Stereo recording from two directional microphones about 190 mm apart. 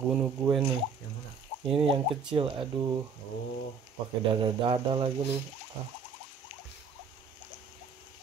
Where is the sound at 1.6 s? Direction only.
30° right (ahead or behind).